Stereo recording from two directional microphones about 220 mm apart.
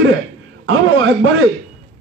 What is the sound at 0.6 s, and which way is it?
Speech, 65° right (ahead or behind).